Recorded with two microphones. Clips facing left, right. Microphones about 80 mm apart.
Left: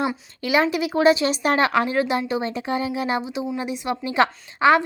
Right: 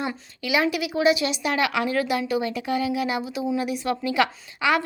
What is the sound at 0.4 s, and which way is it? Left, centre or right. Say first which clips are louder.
A woman's voice: left 3 dB; left.